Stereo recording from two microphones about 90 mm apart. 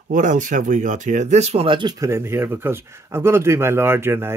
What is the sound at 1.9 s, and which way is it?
Speech, 35° right (ahead or behind).